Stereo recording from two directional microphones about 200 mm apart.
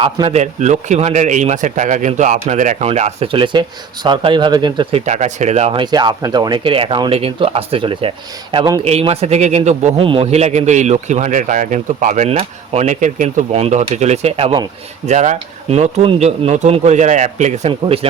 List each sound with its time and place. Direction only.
0.0 s a man's voice: 25° right (ahead or behind)
8.8 s a man's voice: 30° right (ahead or behind)
15.0 s a man's voice: 35° right (ahead or behind)